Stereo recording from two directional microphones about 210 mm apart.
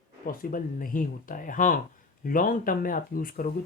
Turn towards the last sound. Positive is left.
turn(degrees=40)  # may be behind; listen again after turning